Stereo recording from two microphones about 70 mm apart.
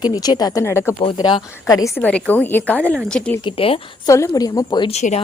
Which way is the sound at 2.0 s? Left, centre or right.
Left.